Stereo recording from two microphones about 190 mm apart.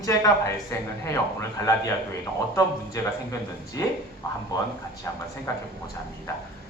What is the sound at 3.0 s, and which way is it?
Speech, 20° left (ahead or behind).